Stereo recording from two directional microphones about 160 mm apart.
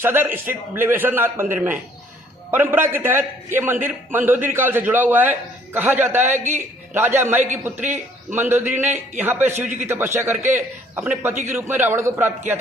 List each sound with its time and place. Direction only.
0.0 s a man's voice: 15° right (ahead or behind)